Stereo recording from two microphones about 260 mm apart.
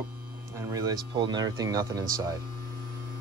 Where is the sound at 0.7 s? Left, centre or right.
Centre.